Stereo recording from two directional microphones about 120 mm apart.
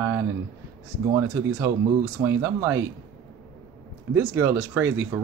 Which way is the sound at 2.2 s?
20° right (ahead or behind).